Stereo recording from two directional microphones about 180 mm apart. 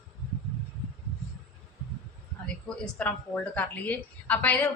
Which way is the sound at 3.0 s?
10° left (ahead or behind).